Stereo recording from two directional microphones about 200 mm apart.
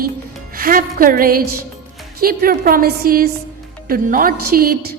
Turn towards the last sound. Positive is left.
turn(degrees=-50)  # may be behind; listen again after turning